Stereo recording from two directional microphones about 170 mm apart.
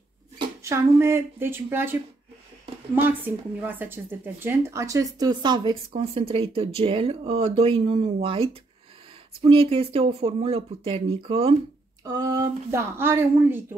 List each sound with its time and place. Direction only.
0.7 s a woman's voice: 15° right (ahead or behind); by 11.5 s 35° right (ahead or behind)
12.0 s a woman's voice: 20° right (ahead or behind)